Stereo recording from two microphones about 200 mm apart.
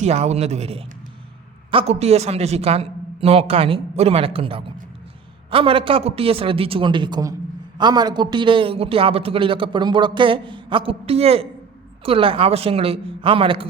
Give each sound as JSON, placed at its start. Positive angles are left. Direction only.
{"t": 0.0, "sound": "a man's voice", "side_deg": -35}